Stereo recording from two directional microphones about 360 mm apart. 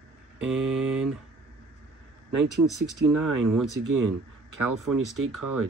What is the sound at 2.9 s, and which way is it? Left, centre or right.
Speech, right.